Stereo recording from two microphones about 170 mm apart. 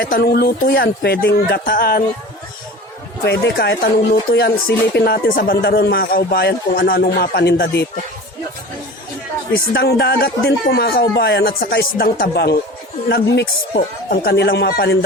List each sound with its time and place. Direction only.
0.0 s speech: 65° left (ahead or behind)
3.2 s a man's voice: 70° left (ahead or behind)
9.7 s a man's voice: 75° left (ahead or behind)
13.7 s a man's voice: 65° left (ahead or behind)